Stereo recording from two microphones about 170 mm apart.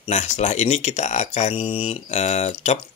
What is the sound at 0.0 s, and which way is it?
Speech, 40° left (ahead or behind).